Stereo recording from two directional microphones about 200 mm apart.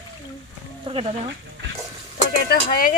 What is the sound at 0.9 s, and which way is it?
Speech, 30° right (ahead or behind).